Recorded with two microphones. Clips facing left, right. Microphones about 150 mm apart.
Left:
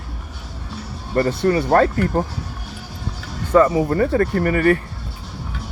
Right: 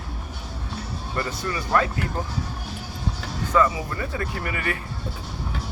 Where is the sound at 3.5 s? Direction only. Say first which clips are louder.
Left 8 dB; 45° left (ahead or behind).